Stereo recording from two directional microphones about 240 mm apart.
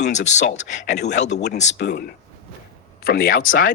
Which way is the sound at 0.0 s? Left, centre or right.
Left.